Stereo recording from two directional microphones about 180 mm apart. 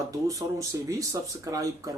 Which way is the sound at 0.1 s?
15° right (ahead or behind).